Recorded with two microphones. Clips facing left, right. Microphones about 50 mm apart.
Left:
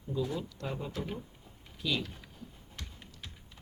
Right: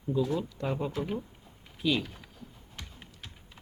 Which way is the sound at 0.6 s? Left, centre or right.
Centre.